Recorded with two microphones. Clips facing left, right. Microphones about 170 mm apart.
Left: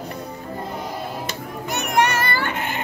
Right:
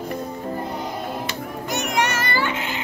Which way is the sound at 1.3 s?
60° left (ahead or behind).